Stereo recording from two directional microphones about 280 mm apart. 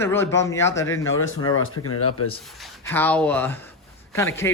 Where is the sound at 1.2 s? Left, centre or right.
Left.